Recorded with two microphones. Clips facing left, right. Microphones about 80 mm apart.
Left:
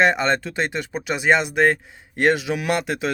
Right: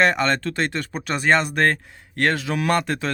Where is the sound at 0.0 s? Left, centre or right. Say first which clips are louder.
Left 1 dB; centre.